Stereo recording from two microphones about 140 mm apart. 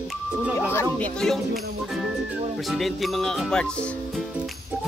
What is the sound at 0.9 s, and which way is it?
Music, 5° left (ahead or behind).